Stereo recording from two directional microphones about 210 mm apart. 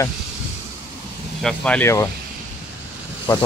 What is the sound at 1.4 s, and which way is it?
Speech, 5° left (ahead or behind).